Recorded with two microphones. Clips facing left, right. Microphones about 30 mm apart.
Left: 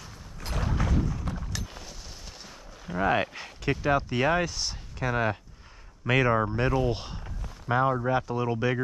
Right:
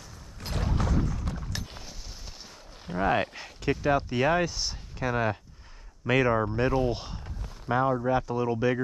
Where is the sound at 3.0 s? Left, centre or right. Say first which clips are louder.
Even; centre.